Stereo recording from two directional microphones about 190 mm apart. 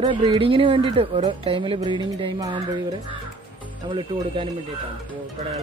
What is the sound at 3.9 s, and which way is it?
Speech, 25° right (ahead or behind).